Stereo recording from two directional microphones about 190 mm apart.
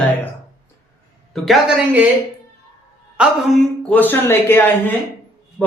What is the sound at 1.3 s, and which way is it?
Speech, centre (ahead or behind).